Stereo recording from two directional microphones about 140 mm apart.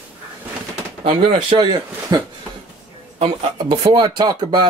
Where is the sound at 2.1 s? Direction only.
25° right (ahead or behind).